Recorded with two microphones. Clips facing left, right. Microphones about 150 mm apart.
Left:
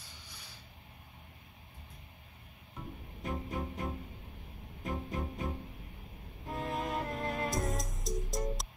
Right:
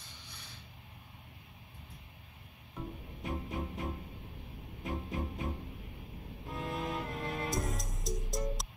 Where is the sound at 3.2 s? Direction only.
45° left (ahead or behind).